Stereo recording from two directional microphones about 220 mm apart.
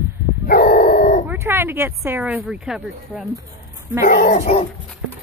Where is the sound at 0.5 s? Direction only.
40° left (ahead or behind).